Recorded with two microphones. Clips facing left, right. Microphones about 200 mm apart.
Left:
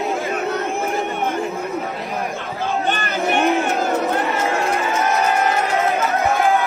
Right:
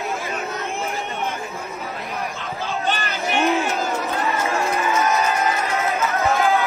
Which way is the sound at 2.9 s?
55° left (ahead or behind).